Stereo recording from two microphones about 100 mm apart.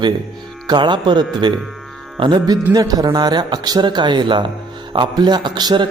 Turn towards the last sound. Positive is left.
turn(degrees=-45)  # may be behind; listen again after turning